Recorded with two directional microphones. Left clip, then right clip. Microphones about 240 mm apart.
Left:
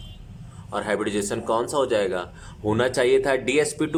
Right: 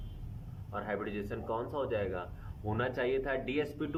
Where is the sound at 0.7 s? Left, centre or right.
Left.